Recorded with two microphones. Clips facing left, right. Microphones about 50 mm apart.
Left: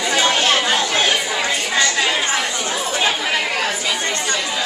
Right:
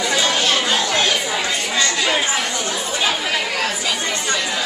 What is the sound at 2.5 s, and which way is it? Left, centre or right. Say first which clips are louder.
Chatter: left 1 dB; left.